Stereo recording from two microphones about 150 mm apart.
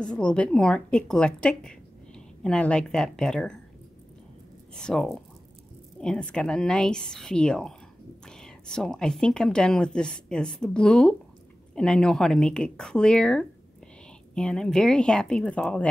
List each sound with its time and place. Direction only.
0.0 s a woman's voice: 5° left (ahead or behind)
4.7 s a woman's voice: 5° left (ahead or behind)